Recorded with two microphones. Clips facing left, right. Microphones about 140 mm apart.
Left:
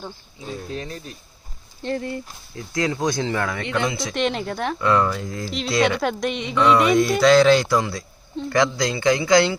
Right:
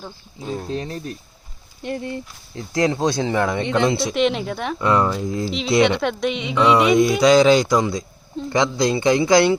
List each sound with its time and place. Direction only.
0.6 s speech: 30° right (ahead or behind)
1.8 s speech: 20° right (ahead or behind)
4.1 s speech: centre (ahead or behind)
4.8 s speech: 20° right (ahead or behind)
5.5 s speech: centre (ahead or behind)
7.3 s speech: 15° right (ahead or behind)